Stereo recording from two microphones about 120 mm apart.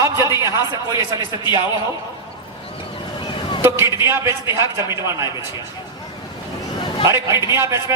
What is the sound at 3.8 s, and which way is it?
A man's voice, 25° right (ahead or behind).